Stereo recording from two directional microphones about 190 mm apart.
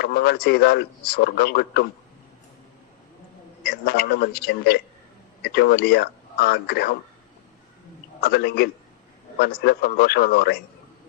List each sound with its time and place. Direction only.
0.0 s a man's voice: 55° left (ahead or behind)
3.6 s a man's voice: 55° left (ahead or behind)
8.2 s a man's voice: 55° left (ahead or behind)